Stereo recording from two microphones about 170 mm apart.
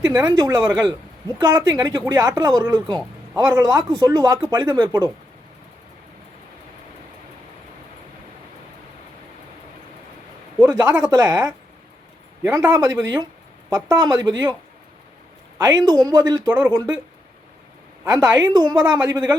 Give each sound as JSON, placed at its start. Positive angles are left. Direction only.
{"t": 0.1, "sound": "speech", "side_deg": -20}
{"t": 10.6, "sound": "speech", "side_deg": -20}
{"t": 15.5, "sound": "speech", "side_deg": -20}
{"t": 18.0, "sound": "speech", "side_deg": -20}